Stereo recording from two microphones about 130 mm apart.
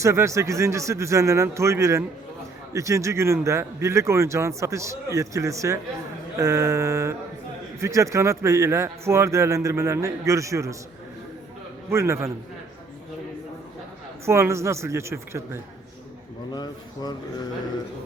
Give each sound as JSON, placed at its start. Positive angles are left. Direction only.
{"t": 0.0, "sound": "a man's voice", "side_deg": -20}
{"t": 11.9, "sound": "a man's voice", "side_deg": -20}
{"t": 14.3, "sound": "a man's voice", "side_deg": -20}
{"t": 16.5, "sound": "speech", "side_deg": 35}